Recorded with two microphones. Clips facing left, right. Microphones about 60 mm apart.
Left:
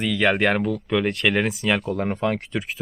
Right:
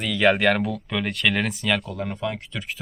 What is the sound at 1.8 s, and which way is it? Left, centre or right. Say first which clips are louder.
Speech: left 5 dB; left.